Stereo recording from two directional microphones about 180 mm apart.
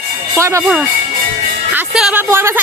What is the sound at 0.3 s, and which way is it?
Speech, 15° right (ahead or behind).